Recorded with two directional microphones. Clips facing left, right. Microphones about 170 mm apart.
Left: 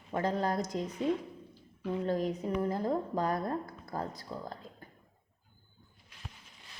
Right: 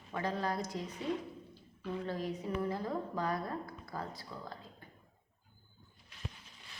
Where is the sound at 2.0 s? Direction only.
45° left (ahead or behind).